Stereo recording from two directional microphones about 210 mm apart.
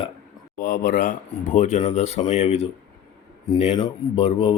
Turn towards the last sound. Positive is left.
turn(degrees=30)  # may be behind; listen again after turning